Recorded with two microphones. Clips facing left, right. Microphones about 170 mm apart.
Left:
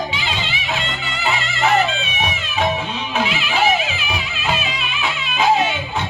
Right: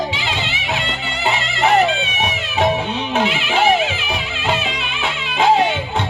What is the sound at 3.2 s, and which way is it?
Music, 60° right (ahead or behind).